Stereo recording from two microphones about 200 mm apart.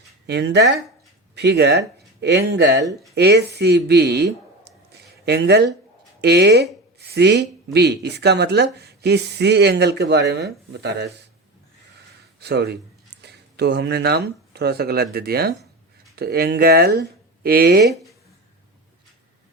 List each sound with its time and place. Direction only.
0.3 s speech: 55° right (ahead or behind)
12.4 s speech: 55° right (ahead or behind)